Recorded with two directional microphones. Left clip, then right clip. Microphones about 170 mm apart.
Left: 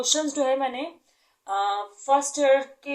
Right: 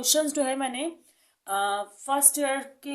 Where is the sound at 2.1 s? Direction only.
30° right (ahead or behind).